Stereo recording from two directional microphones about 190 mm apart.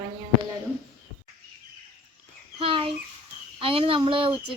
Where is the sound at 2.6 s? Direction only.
30° right (ahead or behind).